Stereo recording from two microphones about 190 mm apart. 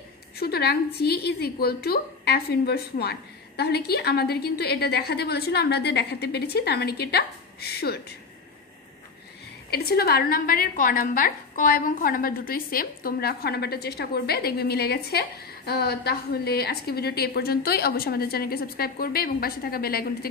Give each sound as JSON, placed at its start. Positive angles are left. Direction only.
{"t": 0.4, "sound": "a woman's voice", "side_deg": 55}
{"t": 9.7, "sound": "a woman's voice", "side_deg": 55}